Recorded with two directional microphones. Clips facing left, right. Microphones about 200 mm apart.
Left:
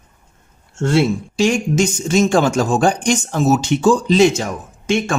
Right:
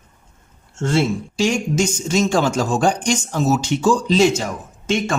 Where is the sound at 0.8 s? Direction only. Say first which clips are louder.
Left 3 dB; 60° left (ahead or behind).